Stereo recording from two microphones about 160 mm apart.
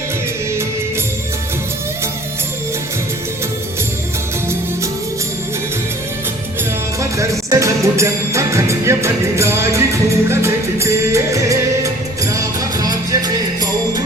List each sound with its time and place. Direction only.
7.2 s music: 20° right (ahead or behind)